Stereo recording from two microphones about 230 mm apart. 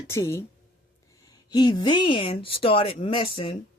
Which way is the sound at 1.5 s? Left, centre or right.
Centre.